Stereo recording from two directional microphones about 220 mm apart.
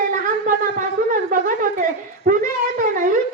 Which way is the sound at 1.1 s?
40° right (ahead or behind).